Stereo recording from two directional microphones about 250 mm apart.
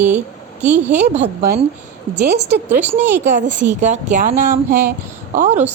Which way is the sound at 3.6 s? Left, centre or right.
Right.